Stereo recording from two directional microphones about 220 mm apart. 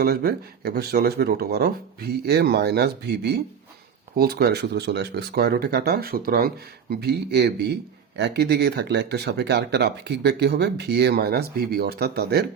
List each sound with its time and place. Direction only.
0.0 s speech: 45° right (ahead or behind)